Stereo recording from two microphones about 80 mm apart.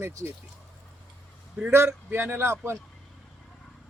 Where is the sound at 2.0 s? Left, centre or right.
Right.